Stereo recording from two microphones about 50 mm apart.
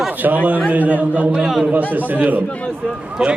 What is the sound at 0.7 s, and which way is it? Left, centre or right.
A man's voice, right.